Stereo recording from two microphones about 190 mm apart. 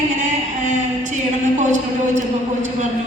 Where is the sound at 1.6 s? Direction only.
40° right (ahead or behind).